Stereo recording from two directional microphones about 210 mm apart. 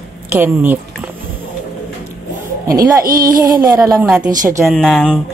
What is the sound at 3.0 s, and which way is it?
Speech, 45° right (ahead or behind).